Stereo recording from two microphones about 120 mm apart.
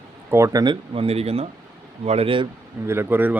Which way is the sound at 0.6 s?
40° right (ahead or behind).